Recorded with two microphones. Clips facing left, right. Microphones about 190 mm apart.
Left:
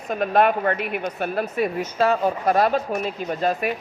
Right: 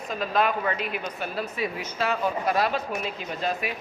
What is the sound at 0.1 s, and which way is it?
A woman's voice, 60° left (ahead or behind).